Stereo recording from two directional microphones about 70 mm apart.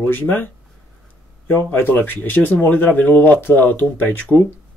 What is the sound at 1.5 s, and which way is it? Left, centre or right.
Speech, left.